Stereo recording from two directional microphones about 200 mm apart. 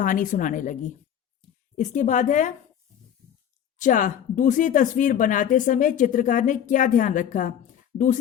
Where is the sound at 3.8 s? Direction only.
40° left (ahead or behind).